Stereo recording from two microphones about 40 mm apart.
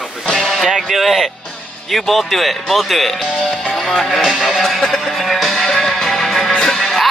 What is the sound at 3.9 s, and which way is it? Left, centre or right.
Music, centre.